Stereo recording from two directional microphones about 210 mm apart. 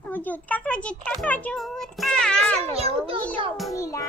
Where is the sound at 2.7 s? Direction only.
25° right (ahead or behind).